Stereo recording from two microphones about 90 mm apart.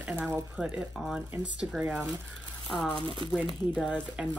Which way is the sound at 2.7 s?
5° left (ahead or behind).